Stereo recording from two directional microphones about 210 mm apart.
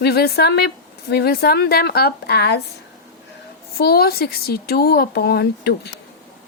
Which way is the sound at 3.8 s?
45° left (ahead or behind).